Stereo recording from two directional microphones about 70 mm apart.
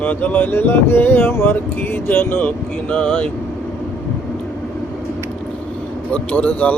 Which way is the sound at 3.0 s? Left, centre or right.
Centre.